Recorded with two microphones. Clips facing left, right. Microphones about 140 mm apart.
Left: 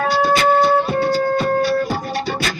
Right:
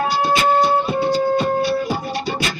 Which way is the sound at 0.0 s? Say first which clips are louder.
Left 2 dB; centre (ahead or behind).